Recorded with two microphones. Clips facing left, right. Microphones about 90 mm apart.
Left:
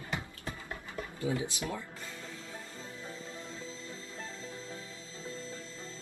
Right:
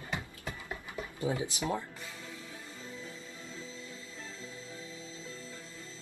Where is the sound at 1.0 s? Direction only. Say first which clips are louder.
Even; 25° right (ahead or behind).